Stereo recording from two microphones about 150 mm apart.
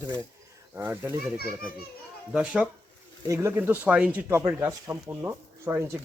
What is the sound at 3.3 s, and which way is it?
Speech, 20° right (ahead or behind).